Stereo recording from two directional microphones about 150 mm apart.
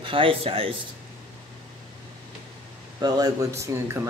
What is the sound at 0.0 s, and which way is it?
Speech, 35° right (ahead or behind).